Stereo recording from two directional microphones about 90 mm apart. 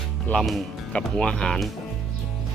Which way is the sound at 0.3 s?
20° left (ahead or behind).